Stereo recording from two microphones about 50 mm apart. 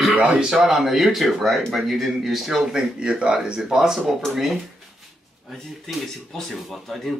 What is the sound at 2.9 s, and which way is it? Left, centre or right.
Speech, centre.